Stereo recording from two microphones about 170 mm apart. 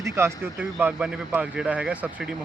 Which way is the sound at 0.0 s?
15° right (ahead or behind).